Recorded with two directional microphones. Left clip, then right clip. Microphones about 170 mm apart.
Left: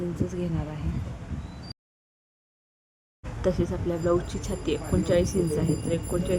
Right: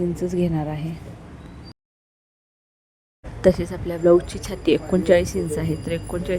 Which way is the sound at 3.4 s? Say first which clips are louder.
Right 8 dB; 25° right (ahead or behind).